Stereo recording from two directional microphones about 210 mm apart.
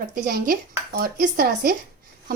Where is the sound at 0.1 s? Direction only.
45° right (ahead or behind).